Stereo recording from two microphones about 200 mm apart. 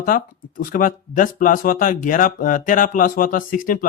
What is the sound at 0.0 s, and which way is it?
Speech, 45° left (ahead or behind).